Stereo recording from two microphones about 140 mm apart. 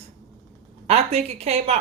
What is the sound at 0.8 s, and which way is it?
Speech, 50° right (ahead or behind).